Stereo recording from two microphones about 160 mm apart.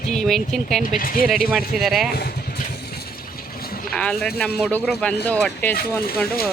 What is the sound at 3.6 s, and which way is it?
Vehicle, 70° left (ahead or behind).